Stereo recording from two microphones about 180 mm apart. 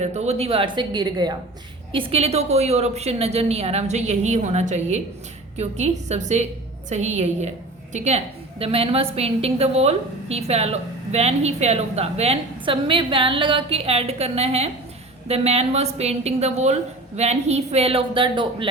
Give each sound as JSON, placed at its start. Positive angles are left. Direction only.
{"t": 0.0, "sound": "a woman's voice", "side_deg": -40}